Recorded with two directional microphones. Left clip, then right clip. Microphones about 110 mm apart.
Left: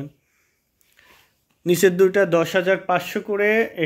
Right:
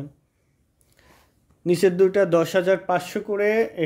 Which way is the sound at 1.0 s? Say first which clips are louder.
Left 4 dB; 25° right (ahead or behind).